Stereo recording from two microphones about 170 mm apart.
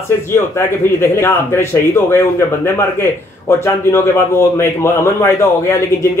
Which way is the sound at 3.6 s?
15° left (ahead or behind).